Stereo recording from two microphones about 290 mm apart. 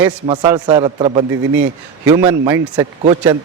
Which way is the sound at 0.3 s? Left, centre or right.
Centre.